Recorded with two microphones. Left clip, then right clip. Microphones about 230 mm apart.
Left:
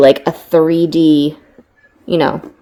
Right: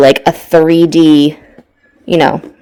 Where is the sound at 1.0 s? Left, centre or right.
Right.